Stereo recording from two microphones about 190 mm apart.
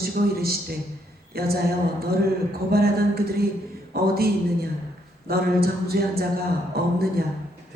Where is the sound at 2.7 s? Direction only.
55° right (ahead or behind).